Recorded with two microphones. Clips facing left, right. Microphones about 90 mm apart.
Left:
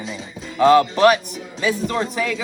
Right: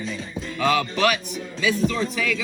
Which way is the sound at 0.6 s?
35° left (ahead or behind).